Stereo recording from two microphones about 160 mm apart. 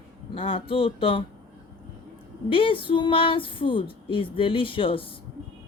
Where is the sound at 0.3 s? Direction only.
35° left (ahead or behind).